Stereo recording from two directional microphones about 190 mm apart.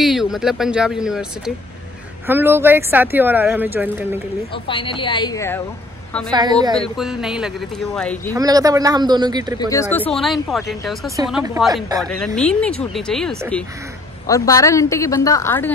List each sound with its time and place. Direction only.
0.0 s speech: centre (ahead or behind)
4.6 s a woman's voice: 25° left (ahead or behind)
6.3 s a man's voice: 20° right (ahead or behind)
6.8 s speech: centre (ahead or behind)
8.3 s a man's voice: 20° right (ahead or behind)
9.6 s speech: 15° left (ahead or behind); by 11.0 s centre (ahead or behind)
12.4 s speech: 5° left (ahead or behind)
14.2 s a woman's voice: 15° left (ahead or behind)